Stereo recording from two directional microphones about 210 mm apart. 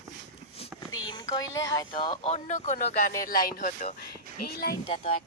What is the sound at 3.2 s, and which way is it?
Speech, 40° left (ahead or behind).